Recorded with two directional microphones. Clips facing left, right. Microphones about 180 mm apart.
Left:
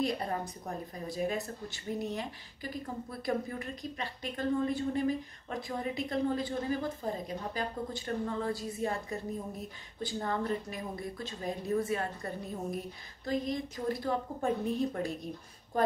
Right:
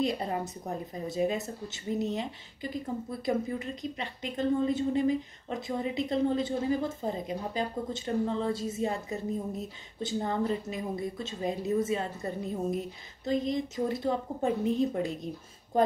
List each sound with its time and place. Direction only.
0.0 s a woman's voice: 20° right (ahead or behind)